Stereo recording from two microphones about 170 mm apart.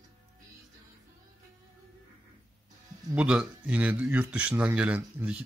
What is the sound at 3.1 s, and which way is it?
Speech, 5° right (ahead or behind).